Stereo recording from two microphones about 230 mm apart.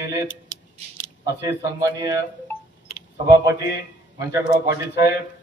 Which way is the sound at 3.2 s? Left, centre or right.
Centre.